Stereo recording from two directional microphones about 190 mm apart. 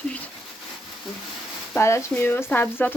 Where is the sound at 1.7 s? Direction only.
15° left (ahead or behind).